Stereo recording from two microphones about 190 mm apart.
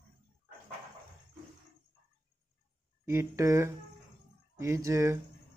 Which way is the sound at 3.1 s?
15° right (ahead or behind).